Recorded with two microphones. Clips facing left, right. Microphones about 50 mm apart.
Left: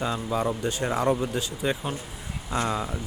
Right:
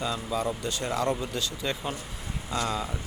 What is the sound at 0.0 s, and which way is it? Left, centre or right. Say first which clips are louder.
Speech: left 3 dB; left.